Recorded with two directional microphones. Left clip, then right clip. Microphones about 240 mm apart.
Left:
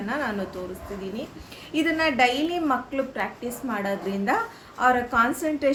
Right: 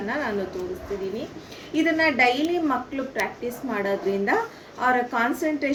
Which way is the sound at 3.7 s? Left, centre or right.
Centre.